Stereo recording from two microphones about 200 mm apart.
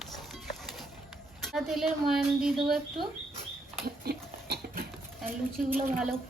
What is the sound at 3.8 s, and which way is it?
Dog, 50° right (ahead or behind).